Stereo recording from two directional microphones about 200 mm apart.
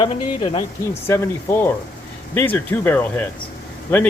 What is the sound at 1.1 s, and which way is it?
Speech, 10° left (ahead or behind).